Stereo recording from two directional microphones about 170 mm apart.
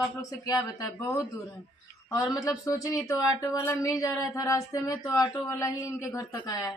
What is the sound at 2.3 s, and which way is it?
A man's voice, 20° left (ahead or behind).